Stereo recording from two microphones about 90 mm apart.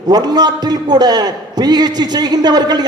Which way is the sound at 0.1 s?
50° right (ahead or behind).